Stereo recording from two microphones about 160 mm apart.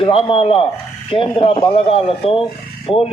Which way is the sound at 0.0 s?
35° left (ahead or behind).